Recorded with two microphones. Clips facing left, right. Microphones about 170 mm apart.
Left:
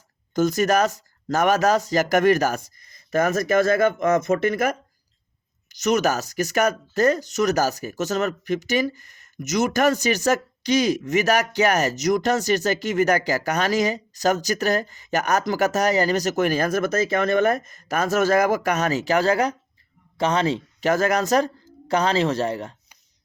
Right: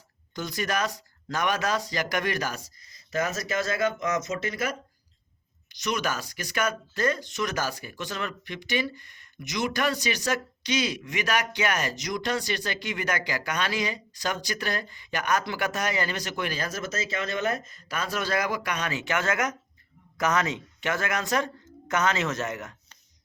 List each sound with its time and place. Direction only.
0.3 s a woman's voice: 45° left (ahead or behind)